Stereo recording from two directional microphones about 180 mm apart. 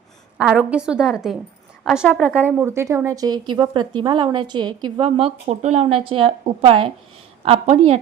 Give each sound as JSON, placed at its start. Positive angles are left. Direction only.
{"t": 0.3, "sound": "a woman's voice", "side_deg": -5}
{"t": 2.5, "sound": "a woman's voice", "side_deg": -10}